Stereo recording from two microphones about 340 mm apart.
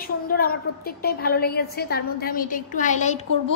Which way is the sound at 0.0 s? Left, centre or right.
Left.